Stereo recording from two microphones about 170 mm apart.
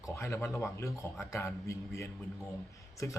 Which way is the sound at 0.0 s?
15° left (ahead or behind).